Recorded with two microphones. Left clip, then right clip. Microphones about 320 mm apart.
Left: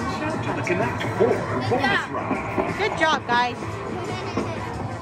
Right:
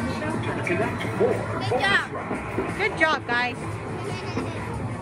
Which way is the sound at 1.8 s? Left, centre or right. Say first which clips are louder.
Right 3 dB; centre.